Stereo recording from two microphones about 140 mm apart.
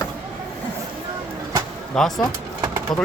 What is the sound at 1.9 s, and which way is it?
Speech, 5° left (ahead or behind).